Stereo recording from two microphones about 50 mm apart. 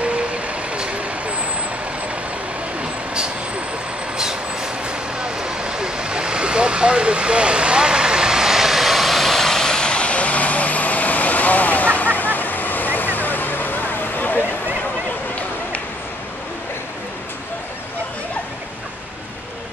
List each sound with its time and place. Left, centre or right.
0.0 s vehicle: right
4.2 s vehicle: centre; by 14.4 s left